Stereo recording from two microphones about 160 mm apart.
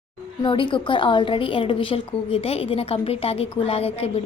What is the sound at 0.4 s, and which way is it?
A woman's voice, 30° left (ahead or behind).